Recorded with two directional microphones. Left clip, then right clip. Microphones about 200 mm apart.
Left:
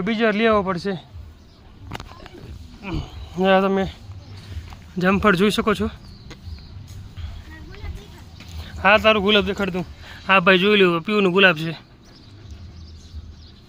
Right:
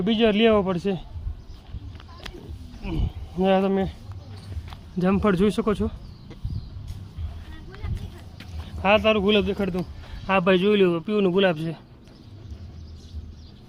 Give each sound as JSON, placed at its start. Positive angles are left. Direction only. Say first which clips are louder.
{"t": 0.0, "sound": "speech", "louder": "left 1 dB", "side_deg": -20}
{"t": 2.8, "sound": "speech", "louder": "left 2 dB", "side_deg": 0}
{"t": 8.4, "sound": "speech", "louder": "left 6 dB", "side_deg": 0}